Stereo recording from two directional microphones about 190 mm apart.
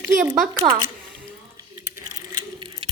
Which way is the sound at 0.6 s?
25° right (ahead or behind).